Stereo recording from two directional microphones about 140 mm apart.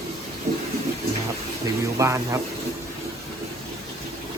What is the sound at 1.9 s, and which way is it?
Speech, 20° right (ahead or behind).